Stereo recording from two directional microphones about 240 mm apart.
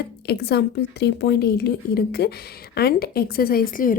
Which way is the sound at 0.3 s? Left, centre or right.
Left.